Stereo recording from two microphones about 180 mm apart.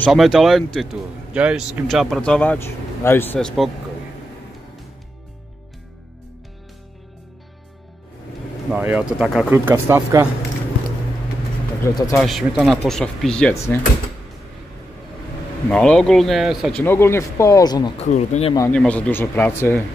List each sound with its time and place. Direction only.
0.1 s speech: centre (ahead or behind)
8.7 s speech: 5° right (ahead or behind)
11.8 s speech: 15° left (ahead or behind)
12.2 s speech: centre (ahead or behind)
15.7 s speech: 5° left (ahead or behind)
16.8 s speech: 15° left (ahead or behind)
17.9 s speech: 40° left (ahead or behind)
18.7 s speech: 5° left (ahead or behind)